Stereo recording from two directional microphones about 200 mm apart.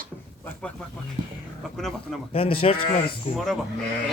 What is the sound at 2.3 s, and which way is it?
Speech, 30° left (ahead or behind).